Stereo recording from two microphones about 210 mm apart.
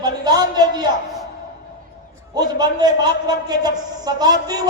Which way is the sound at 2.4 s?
20° right (ahead or behind).